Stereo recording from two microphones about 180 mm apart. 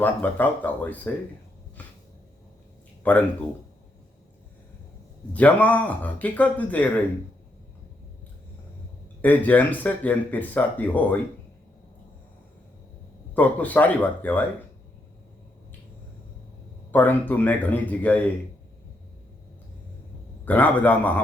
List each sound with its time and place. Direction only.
0.0 s speech: 10° left (ahead or behind)
1.8 s a sound: 10° left (ahead or behind)
3.0 s speech: 10° left (ahead or behind)
5.3 s speech: 10° left (ahead or behind)
9.2 s speech: 10° left (ahead or behind)
13.3 s speech: 10° left (ahead or behind)
16.9 s speech: 10° left (ahead or behind)
20.4 s speech: 10° left (ahead or behind)